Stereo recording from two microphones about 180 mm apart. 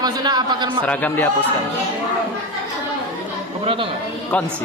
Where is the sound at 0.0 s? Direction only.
20° right (ahead or behind).